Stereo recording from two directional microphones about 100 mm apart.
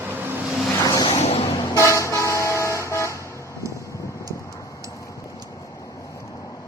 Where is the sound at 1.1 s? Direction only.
90° left.